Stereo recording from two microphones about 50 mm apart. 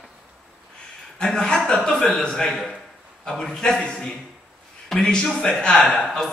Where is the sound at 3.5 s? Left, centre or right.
Centre.